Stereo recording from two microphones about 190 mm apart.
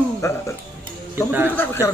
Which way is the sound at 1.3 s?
10° right (ahead or behind).